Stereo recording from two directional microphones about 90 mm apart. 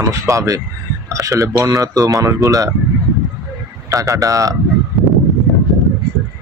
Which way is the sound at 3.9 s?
40° right (ahead or behind).